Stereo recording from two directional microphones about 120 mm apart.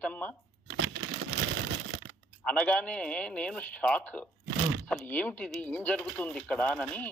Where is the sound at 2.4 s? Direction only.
10° left (ahead or behind).